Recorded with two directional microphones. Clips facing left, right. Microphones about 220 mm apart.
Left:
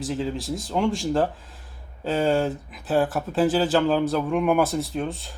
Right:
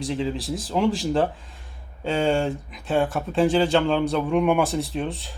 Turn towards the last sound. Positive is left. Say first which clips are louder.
# even
turn(degrees=0)  # may be behind; listen again after turning